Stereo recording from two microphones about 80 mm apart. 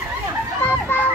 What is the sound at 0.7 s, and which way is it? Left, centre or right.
Children playing, left.